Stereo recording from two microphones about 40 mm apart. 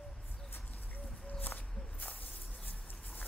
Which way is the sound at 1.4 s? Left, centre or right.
Left.